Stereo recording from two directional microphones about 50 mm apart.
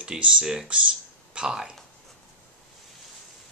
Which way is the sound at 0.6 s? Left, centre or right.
Right.